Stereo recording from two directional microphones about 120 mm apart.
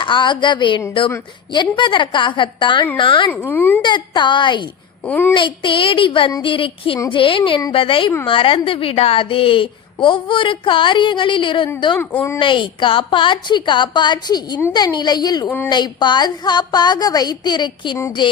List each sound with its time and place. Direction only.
0.0 s a woman's voice: 40° left (ahead or behind)
3.2 s speech: 15° left (ahead or behind)
3.8 s a woman's voice: 40° left (ahead or behind)
5.0 s speech: 15° left (ahead or behind)
5.3 s a woman's voice: 45° left (ahead or behind)
11.9 s speech: 20° left (ahead or behind)
12.4 s a woman's voice: 45° left (ahead or behind)
15.4 s speech: 15° left (ahead or behind)
15.7 s a woman's voice: 40° left (ahead or behind)